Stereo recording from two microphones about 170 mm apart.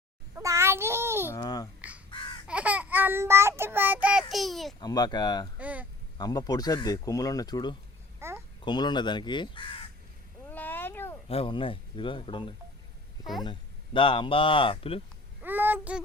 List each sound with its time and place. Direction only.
0.3 s child singing: 15° right (ahead or behind)
1.3 s babbling: 25° left (ahead or behind)
2.0 s a sound: 30° left (ahead or behind)
2.5 s child singing: 10° right (ahead or behind)
4.8 s speech: 25° left (ahead or behind)
5.5 s speech: 10° right (ahead or behind)
6.1 s speech: 25° left (ahead or behind)
8.2 s babbling: 15° right (ahead or behind)
8.6 s speech: 25° left (ahead or behind)
10.5 s a sound: 10° left (ahead or behind)
11.3 s speech: 30° left (ahead or behind)
15.4 s babbling: 10° right (ahead or behind)